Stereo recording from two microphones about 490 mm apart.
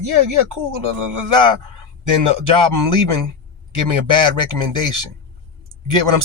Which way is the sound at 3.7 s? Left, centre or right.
Right.